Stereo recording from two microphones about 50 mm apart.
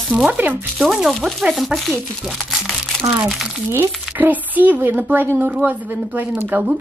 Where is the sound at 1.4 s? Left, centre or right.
Centre.